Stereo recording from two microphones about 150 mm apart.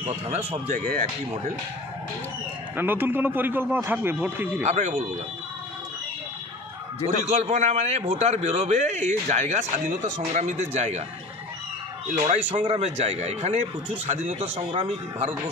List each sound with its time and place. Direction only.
0.0 s speech: 45° right (ahead or behind)
0.7 s speech: 60° right (ahead or behind)
2.7 s a man's voice: 15° right (ahead or behind)
4.6 s speech: 55° right (ahead or behind)
7.1 s speech: 45° right (ahead or behind)
12.3 s speech: 50° right (ahead or behind)
14.5 s a man's voice: 35° right (ahead or behind)